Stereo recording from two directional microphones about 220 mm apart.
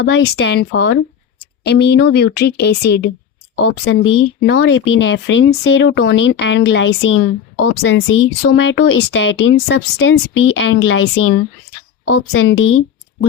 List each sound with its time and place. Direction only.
0.0 s speech: 50° left (ahead or behind); by 11.3 s 70° left (ahead or behind)
12.0 s speech: 60° left (ahead or behind)